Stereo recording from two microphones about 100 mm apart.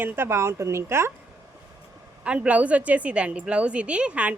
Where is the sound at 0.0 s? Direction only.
20° right (ahead or behind).